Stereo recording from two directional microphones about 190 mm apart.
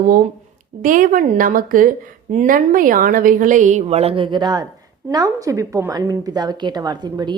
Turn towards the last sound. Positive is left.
turn(degrees=-20)  # may be behind; listen again after turning